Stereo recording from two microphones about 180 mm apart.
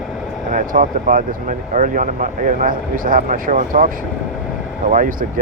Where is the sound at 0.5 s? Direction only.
45° right (ahead or behind).